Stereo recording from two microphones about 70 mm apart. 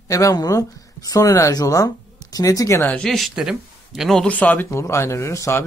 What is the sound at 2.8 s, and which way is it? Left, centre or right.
Speech, centre.